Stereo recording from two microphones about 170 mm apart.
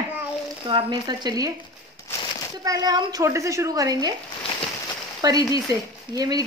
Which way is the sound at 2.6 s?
20° right (ahead or behind).